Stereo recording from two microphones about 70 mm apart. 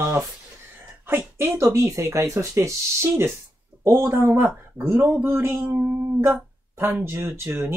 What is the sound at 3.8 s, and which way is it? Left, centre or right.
Speech, right.